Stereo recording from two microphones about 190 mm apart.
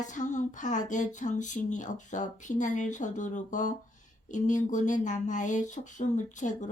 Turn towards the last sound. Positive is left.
turn(degrees=40)  # may be behind; listen again after turning